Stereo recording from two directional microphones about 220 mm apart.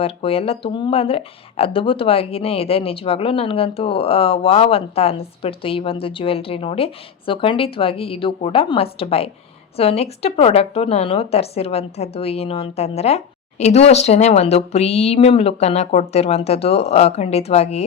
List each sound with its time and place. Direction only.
0.0 s speech: 25° left (ahead or behind)